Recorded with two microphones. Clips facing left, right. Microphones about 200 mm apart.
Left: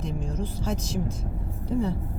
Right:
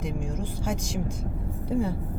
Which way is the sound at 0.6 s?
15° right (ahead or behind).